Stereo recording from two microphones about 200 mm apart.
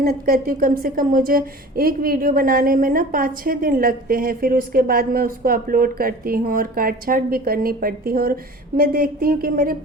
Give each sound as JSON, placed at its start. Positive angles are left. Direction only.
{"t": 0.0, "sound": "a woman's voice", "side_deg": -50}